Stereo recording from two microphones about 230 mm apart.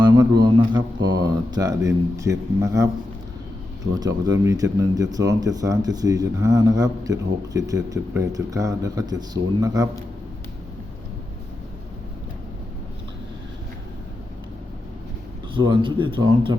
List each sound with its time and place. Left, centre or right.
0.0 s a man's voice: centre
4.0 s speech: centre
15.5 s a man's voice: right